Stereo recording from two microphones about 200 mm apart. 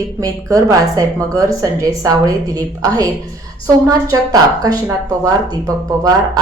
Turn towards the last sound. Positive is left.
turn(degrees=-20)  # may be behind; listen again after turning